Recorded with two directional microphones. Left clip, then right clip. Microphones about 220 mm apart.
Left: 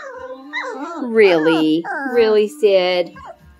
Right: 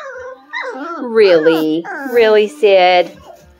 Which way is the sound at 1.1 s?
15° left (ahead or behind).